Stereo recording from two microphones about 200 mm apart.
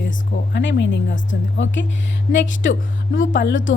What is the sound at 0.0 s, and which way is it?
A woman's voice, 55° left (ahead or behind).